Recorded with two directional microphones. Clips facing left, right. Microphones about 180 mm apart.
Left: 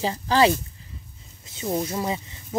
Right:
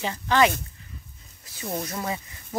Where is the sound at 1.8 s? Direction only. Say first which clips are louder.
Left 4 dB; 25° left (ahead or behind).